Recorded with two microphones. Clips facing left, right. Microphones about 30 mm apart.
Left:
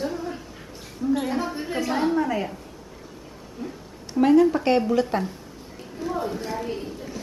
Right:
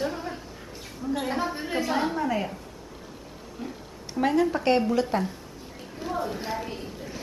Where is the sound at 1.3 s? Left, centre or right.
Centre.